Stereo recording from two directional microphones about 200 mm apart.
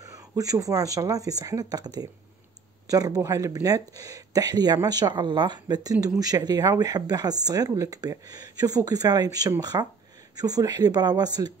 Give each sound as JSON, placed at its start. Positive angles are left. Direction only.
{"t": 0.1, "sound": "speech", "side_deg": -15}